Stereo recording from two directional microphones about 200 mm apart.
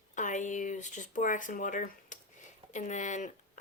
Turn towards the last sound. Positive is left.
turn(degrees=35)  # may be behind; listen again after turning